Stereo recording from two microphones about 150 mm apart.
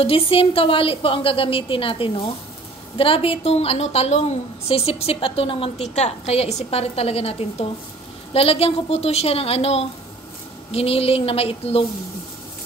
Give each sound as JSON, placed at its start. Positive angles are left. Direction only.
{"t": 0.0, "sound": "a woman's voice", "side_deg": 40}